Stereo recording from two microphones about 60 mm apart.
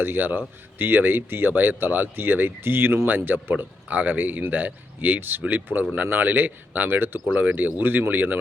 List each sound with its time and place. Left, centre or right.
0.0 s speech: right
3.5 s speech: right